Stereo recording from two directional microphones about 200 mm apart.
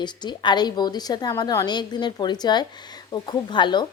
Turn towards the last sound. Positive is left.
turn(degrees=20)  # may be behind; listen again after turning